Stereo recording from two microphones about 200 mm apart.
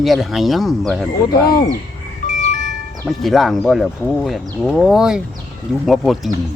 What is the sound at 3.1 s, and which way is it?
Speech, centre (ahead or behind).